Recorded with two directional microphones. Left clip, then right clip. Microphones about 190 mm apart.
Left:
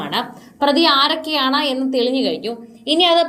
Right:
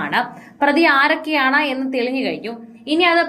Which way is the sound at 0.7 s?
5° right (ahead or behind).